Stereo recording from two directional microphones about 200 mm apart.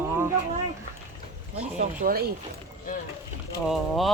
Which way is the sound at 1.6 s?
40° right (ahead or behind).